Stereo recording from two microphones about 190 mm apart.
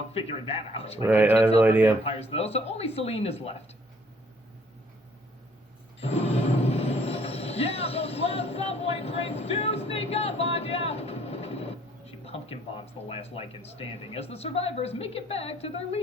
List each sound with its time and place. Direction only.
0.1 s speech: 30° left (ahead or behind)
1.0 s speech: 10° right (ahead or behind)
2.0 s speech: 30° left (ahead or behind)
6.0 s music: 35° left (ahead or behind)
12.2 s speech: 30° left (ahead or behind)